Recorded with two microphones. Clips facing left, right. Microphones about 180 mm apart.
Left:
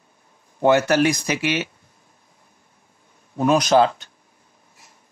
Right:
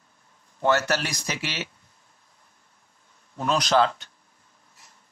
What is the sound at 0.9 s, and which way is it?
Speech, 55° left (ahead or behind).